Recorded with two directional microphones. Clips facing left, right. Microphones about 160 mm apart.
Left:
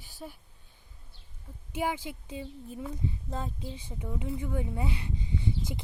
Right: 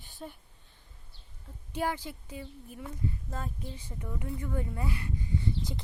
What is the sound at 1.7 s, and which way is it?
Speech, 15° left (ahead or behind).